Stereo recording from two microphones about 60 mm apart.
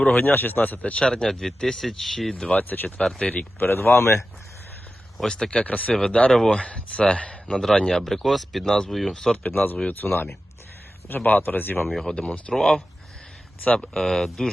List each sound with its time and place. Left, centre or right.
0.0 s speech: left
0.8 s speech: centre
2.5 s speech: left
3.0 s speech: centre
3.3 s speech: left
5.1 s speech: centre
7.8 s speech: centre
9.5 s speech: left
12.0 s speech: centre